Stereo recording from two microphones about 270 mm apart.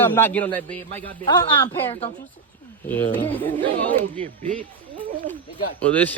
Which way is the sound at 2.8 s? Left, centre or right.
Centre.